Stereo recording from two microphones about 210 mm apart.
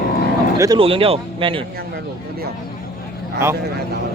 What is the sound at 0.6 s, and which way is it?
A man's voice, 20° right (ahead or behind).